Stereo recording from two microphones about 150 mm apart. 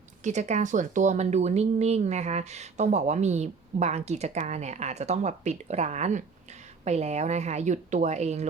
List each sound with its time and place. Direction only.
0.3 s speech: 50° right (ahead or behind)